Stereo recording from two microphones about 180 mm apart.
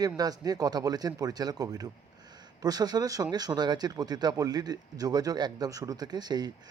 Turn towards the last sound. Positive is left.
turn(degrees=-25)  # may be behind; listen again after turning